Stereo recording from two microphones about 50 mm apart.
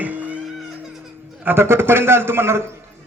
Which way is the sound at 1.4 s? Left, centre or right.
Right.